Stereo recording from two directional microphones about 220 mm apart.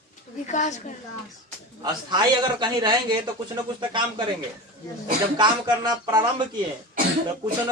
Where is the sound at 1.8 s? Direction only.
20° right (ahead or behind).